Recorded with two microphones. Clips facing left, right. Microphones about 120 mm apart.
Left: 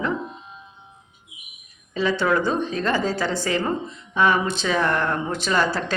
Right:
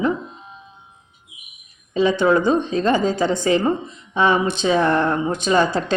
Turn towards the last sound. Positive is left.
turn(degrees=-20)  # may be behind; listen again after turning